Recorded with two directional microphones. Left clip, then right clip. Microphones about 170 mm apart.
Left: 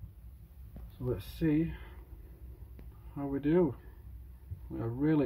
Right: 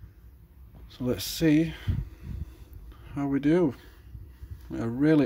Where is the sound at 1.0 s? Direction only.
50° right (ahead or behind).